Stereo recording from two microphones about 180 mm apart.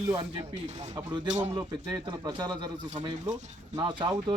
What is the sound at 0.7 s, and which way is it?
Speech, 40° right (ahead or behind).